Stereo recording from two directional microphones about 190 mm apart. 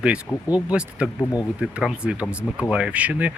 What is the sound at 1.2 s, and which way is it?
Speech, 20° left (ahead or behind).